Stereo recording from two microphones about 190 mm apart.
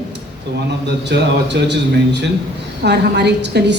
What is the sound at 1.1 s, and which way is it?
A woman's voice, 65° right (ahead or behind).